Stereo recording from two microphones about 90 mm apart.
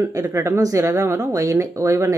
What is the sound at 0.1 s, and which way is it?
Speech, 30° right (ahead or behind).